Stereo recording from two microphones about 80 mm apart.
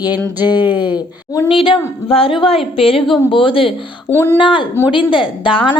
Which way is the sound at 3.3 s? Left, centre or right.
Left.